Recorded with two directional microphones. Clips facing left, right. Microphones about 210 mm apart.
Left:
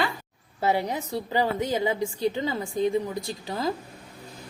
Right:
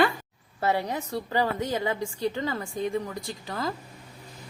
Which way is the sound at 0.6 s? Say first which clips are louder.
Left 2 dB; 20° left (ahead or behind).